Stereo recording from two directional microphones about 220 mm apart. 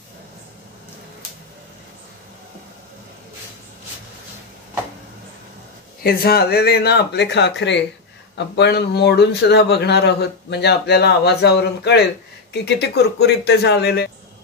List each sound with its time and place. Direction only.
6.0 s a man's voice: 45° left (ahead or behind)